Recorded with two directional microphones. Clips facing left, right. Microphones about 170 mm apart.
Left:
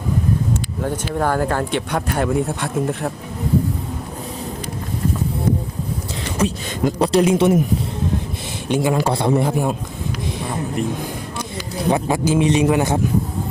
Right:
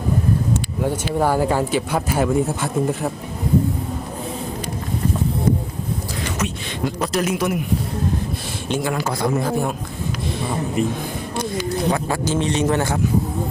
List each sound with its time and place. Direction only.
0.8 s speech: 10° right (ahead or behind)
6.4 s speech: 30° left (ahead or behind)
8.7 s a man's voice: 15° left (ahead or behind)
9.0 s speech: 30° left (ahead or behind)
9.5 s a man's voice: 15° left (ahead or behind)
10.8 s speech: centre (ahead or behind)
11.9 s a man's voice: 20° left (ahead or behind)